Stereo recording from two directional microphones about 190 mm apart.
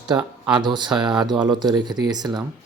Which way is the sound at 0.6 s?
25° right (ahead or behind).